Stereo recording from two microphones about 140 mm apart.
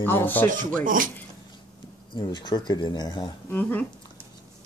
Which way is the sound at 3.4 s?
15° left (ahead or behind).